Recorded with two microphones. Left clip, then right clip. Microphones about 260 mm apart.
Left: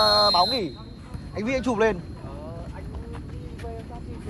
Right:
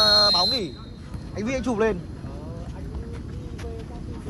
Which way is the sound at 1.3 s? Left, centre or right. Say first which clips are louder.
Left 1 dB; left.